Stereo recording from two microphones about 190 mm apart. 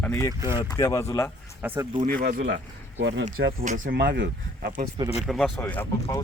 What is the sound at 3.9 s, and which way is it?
Speech, 55° right (ahead or behind).